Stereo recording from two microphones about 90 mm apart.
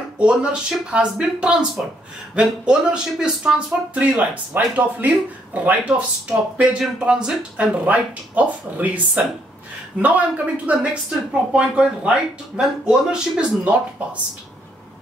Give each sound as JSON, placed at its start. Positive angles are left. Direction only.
{"t": 0.2, "sound": "speech", "side_deg": -10}